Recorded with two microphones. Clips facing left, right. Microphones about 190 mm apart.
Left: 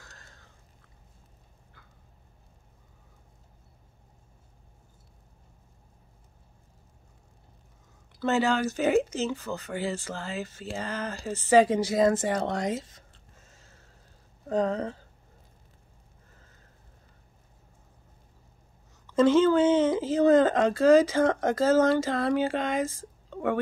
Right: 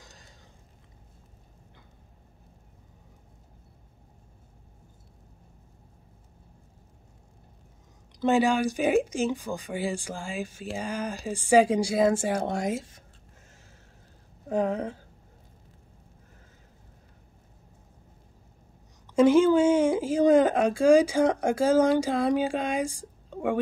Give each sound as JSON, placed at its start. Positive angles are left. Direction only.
{"t": 0.0, "sound": "a sound", "side_deg": -15}
{"t": 8.2, "sound": "speech", "side_deg": -15}
{"t": 14.5, "sound": "speech", "side_deg": -10}
{"t": 19.0, "sound": "speech", "side_deg": -10}